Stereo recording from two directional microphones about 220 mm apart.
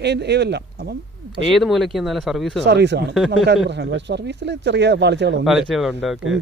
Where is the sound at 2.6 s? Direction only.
50° right (ahead or behind).